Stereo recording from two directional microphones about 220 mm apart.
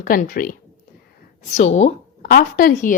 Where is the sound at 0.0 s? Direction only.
40° left (ahead or behind).